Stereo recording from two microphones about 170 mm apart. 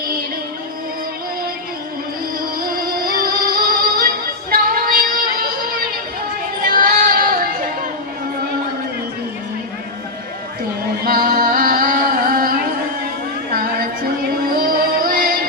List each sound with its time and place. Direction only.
2.6 s music: 60° right (ahead or behind)
4.5 s female singing: 55° right (ahead or behind)
6.6 s music: 55° right (ahead or behind)
11.0 s music: 55° right (ahead or behind)
13.5 s music: 60° right (ahead or behind)